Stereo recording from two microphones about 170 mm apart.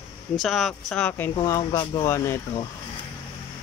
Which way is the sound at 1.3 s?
25° left (ahead or behind).